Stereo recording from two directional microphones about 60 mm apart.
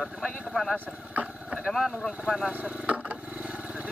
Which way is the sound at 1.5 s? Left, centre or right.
Centre.